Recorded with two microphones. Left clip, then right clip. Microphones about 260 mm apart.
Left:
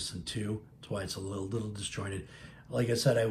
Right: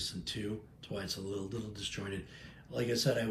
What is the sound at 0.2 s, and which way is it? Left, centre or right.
Speech, centre.